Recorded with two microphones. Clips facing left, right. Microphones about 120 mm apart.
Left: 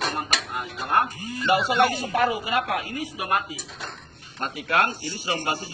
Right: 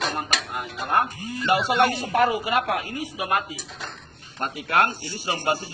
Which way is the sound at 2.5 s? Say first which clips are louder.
Right 1 dB; 45° right (ahead or behind).